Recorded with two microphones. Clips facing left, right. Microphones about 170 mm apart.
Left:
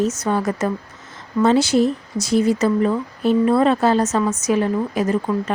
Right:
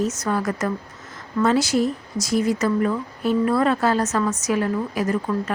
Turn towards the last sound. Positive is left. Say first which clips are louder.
# left 3 dB
turn(degrees=25)  # may be behind; listen again after turning